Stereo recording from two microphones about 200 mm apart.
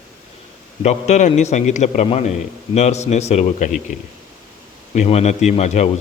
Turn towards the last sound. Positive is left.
turn(degrees=35)  # may be behind; listen again after turning